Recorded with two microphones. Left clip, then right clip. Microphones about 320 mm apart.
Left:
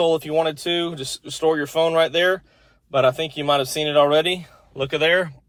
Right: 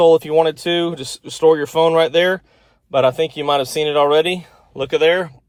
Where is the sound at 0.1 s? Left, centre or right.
Right.